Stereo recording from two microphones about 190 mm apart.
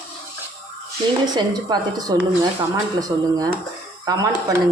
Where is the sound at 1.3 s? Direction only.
20° right (ahead or behind).